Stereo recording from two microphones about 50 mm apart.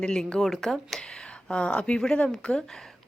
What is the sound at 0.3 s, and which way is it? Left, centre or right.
Speech, centre.